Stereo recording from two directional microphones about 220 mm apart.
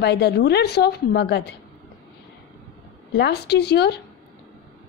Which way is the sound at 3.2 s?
50° left (ahead or behind).